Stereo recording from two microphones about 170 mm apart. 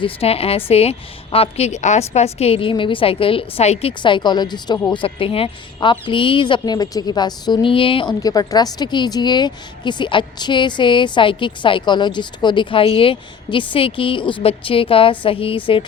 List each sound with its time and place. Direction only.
0.0 s a woman's voice: 35° left (ahead or behind)